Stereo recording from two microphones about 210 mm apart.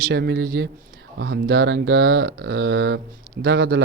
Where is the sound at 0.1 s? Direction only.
55° right (ahead or behind).